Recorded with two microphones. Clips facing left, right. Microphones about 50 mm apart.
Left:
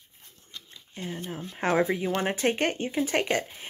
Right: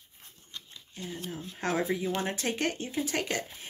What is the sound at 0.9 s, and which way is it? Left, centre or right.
Speech, left.